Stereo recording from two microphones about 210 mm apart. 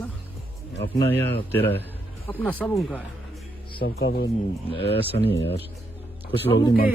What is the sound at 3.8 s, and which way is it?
Speech, 50° left (ahead or behind).